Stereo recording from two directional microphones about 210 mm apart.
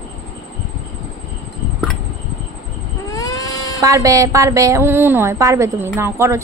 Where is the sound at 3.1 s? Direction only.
15° left (ahead or behind).